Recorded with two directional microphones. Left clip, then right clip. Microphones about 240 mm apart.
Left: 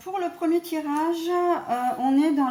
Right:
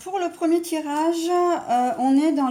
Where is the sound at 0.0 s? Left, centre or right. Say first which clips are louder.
Right 3 dB; right.